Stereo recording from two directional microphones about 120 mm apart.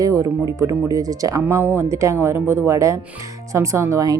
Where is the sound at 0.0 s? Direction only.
30° right (ahead or behind).